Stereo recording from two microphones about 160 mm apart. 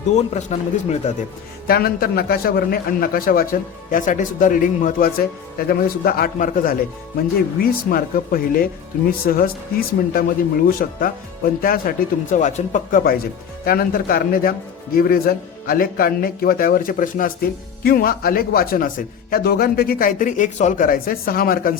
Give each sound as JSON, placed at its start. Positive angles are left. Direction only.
{"t": 0.5, "sound": "speech", "side_deg": 45}
{"t": 1.6, "sound": "speech", "side_deg": 70}
{"t": 13.7, "sound": "speech", "side_deg": 65}